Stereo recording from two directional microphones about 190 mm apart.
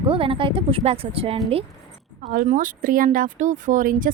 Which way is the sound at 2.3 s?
45° right (ahead or behind).